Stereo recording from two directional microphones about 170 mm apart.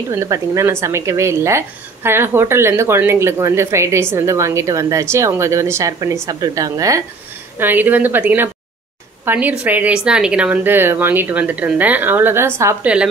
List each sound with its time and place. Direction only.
0.1 s speech: 15° right (ahead or behind)